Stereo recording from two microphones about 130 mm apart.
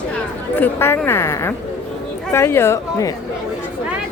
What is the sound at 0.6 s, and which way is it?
A woman's voice, 15° left (ahead or behind).